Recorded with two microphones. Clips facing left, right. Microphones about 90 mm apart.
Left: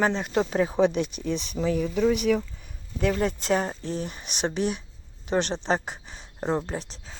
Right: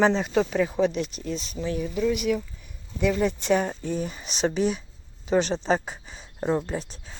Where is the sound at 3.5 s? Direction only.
25° left (ahead or behind).